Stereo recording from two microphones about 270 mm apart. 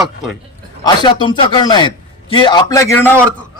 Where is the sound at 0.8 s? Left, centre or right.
Centre.